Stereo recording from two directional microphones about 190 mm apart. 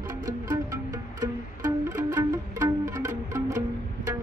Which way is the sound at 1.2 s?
15° right (ahead or behind).